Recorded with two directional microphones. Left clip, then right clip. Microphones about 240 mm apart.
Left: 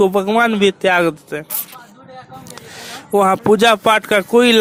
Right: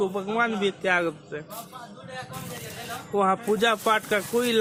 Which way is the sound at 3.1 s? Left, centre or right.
Left.